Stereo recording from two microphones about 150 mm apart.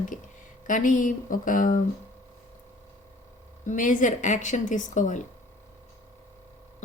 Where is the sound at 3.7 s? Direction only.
60° left (ahead or behind).